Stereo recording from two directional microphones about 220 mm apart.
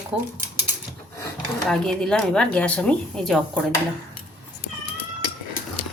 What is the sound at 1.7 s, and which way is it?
Speech, 5° left (ahead or behind).